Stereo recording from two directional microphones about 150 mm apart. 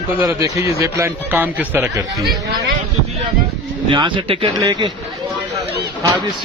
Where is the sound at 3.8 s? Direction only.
35° right (ahead or behind).